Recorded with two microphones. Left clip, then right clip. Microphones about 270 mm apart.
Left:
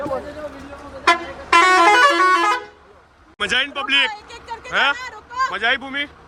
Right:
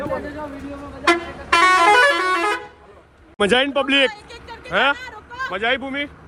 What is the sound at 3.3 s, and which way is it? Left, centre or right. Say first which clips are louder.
Speech: right 3 dB; centre.